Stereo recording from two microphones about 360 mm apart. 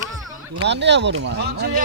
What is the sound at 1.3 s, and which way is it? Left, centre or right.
Speech, right.